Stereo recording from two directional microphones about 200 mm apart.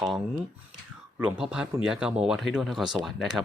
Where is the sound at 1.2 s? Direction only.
5° right (ahead or behind).